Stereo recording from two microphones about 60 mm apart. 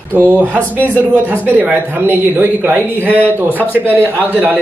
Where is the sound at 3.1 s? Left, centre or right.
Left.